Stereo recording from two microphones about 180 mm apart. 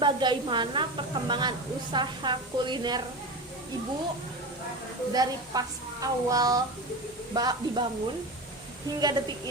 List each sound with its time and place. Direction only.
0.0 s a woman's voice: 25° right (ahead or behind)
5.1 s a woman's voice: 20° right (ahead or behind)
9.0 s a woman's voice: 20° right (ahead or behind)